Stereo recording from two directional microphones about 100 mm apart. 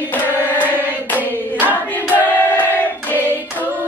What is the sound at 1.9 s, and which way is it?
Choir, 15° left (ahead or behind).